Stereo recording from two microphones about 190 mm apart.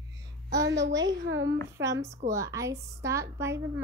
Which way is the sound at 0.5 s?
60° right (ahead or behind).